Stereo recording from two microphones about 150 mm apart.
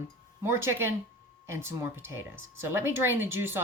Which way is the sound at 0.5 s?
15° right (ahead or behind).